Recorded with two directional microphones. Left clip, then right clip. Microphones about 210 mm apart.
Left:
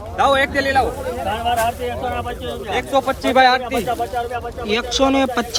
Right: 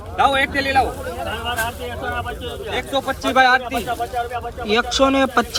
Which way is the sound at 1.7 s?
40° left (ahead or behind).